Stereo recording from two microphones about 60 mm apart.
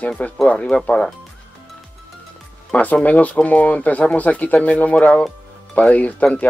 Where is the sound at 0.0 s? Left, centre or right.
Left.